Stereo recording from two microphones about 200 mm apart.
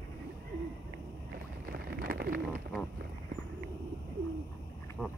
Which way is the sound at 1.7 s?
50° right (ahead or behind).